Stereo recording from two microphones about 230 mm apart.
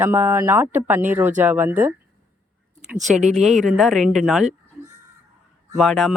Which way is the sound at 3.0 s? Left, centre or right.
Right.